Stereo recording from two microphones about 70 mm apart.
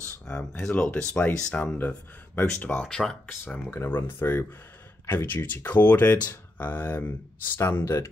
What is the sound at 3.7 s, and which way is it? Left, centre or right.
Speech, left.